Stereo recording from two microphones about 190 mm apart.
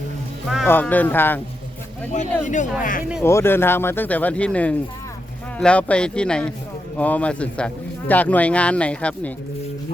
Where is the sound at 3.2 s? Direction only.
15° left (ahead or behind).